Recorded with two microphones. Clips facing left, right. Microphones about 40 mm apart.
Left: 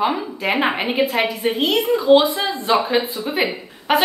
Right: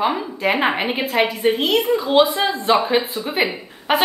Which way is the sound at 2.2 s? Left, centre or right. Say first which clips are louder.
Right 1 dB; right.